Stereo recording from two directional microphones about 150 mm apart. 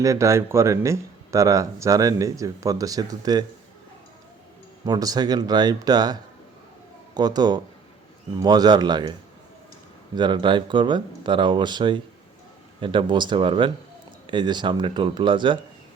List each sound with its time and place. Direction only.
0.0 s speech: 20° right (ahead or behind)
4.9 s speech: 25° right (ahead or behind)
10.2 s speech: 30° right (ahead or behind)